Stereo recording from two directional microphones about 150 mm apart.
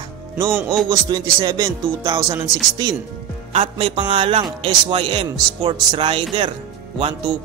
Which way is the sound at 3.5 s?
35° right (ahead or behind).